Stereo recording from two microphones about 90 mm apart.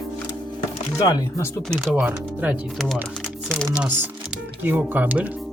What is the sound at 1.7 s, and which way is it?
Speech, 10° right (ahead or behind).